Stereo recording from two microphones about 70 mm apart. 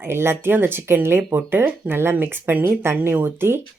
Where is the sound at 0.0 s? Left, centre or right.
Right.